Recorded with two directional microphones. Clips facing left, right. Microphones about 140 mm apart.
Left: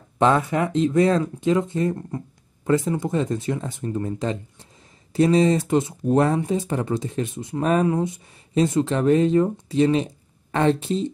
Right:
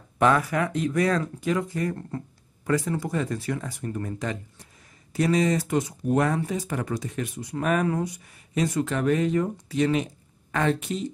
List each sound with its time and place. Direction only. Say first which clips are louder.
0.2 s speech: left 3 dB; 25° left (ahead or behind)